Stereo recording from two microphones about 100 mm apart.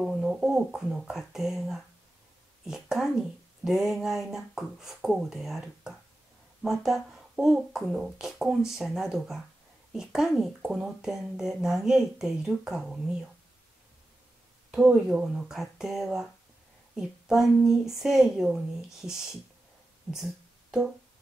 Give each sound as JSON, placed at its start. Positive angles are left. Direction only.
{"t": 0.0, "sound": "speech", "side_deg": -10}
{"t": 14.7, "sound": "speech", "side_deg": -5}